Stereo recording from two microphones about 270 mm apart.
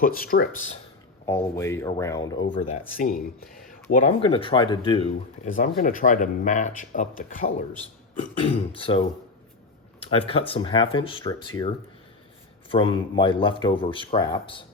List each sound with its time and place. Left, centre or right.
0.0 s speech: left
1.5 s speech: centre
2.6 s speech: left
8.7 s speech: centre